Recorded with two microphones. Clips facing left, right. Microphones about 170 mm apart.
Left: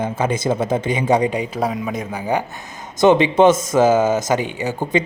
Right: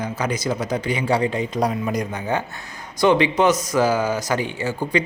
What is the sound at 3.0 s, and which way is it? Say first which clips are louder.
Speech: left 4 dB; 20° left (ahead or behind).